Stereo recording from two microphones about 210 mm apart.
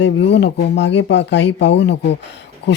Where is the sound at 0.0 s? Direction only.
55° left (ahead or behind).